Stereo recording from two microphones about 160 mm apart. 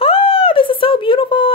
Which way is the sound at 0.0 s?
35° left (ahead or behind).